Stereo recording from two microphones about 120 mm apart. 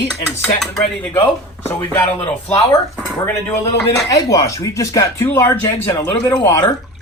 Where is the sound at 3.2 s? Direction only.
15° left (ahead or behind).